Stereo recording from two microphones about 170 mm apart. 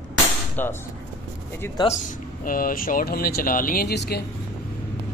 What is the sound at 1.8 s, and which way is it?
Speech, 50° left (ahead or behind).